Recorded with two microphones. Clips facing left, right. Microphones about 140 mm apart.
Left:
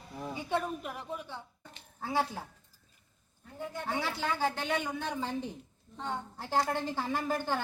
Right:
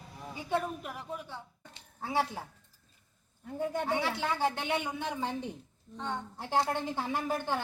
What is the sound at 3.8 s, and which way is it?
A woman's voice, 20° right (ahead or behind).